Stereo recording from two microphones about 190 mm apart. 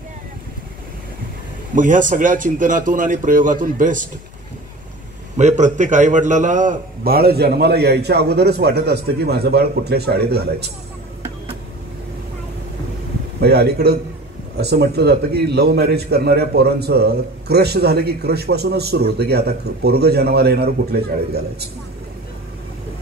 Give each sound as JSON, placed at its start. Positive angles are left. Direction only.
{"t": 1.8, "sound": "speech", "side_deg": -45}
{"t": 5.4, "sound": "a man's voice", "side_deg": -40}
{"t": 13.4, "sound": "a man's voice", "side_deg": -60}